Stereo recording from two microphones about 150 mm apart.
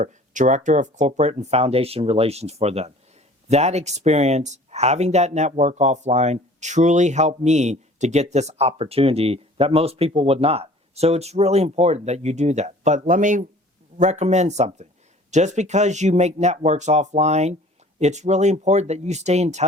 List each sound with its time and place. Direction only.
0.0 s speech: 55° right (ahead or behind)